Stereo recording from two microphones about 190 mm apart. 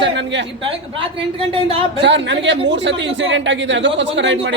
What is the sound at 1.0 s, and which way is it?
Speech, 30° right (ahead or behind).